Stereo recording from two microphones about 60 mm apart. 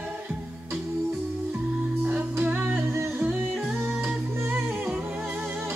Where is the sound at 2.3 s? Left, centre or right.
Right.